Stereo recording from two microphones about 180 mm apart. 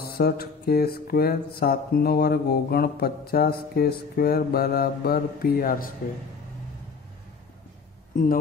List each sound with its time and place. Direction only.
0.0 s mantra: 60° left (ahead or behind)